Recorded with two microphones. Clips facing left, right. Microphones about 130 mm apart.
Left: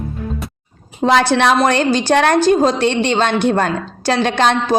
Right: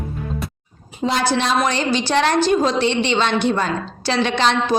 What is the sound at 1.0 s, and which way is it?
Speech, 60° left (ahead or behind).